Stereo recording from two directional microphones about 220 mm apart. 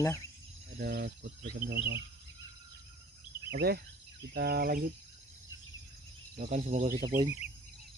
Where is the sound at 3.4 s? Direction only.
45° right (ahead or behind).